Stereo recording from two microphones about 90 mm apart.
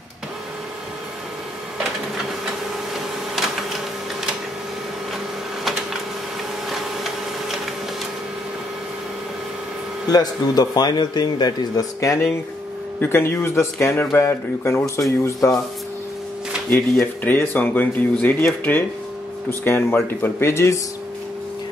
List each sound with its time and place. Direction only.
10.1 s a man's voice: 45° left (ahead or behind)
13.0 s speech: 25° left (ahead or behind)
17.0 s speech: 20° left (ahead or behind)